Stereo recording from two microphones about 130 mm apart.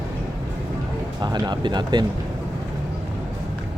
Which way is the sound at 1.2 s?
35° right (ahead or behind).